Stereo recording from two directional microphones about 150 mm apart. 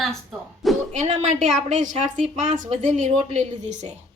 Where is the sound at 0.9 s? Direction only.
50° right (ahead or behind).